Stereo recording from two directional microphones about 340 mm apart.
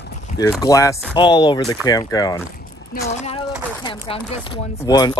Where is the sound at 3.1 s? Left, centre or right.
Centre.